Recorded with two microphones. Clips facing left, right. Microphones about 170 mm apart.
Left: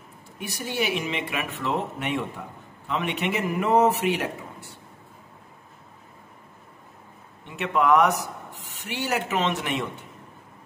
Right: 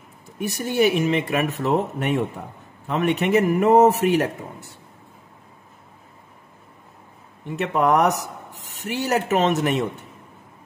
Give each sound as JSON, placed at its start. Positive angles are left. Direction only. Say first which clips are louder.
{"t": 0.7, "sound": "a man's voice", "louder": "right 8 dB", "side_deg": -45}
{"t": 7.4, "sound": "speech", "louder": "right 2 dB", "side_deg": -40}